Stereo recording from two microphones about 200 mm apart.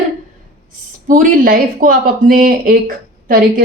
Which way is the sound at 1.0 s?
40° right (ahead or behind).